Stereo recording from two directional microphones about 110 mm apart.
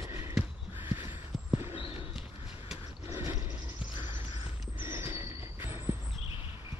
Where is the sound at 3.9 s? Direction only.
45° left (ahead or behind).